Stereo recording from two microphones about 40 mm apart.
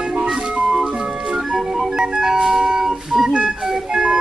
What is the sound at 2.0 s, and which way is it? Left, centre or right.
Organ, centre.